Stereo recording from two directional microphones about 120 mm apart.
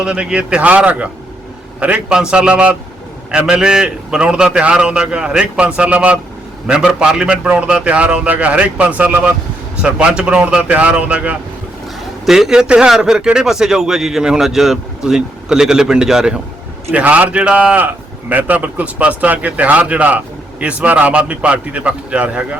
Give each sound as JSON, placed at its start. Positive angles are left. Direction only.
{"t": 0.0, "sound": "a man's voice", "side_deg": -5}